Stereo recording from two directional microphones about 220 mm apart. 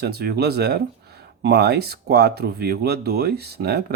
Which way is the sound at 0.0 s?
50° right (ahead or behind).